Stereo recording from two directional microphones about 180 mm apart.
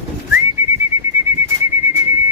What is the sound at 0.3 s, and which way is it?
Bird, 10° right (ahead or behind).